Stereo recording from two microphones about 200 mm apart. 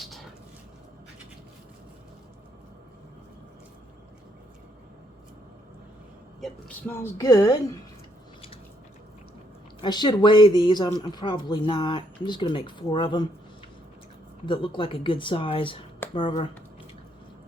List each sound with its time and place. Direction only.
6.4 s a woman's voice: 5° left (ahead or behind)
9.8 s speech: 20° left (ahead or behind)
14.4 s speech: 25° left (ahead or behind)